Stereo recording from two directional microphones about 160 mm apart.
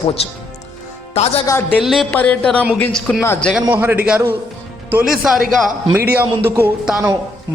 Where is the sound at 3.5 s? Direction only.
10° right (ahead or behind).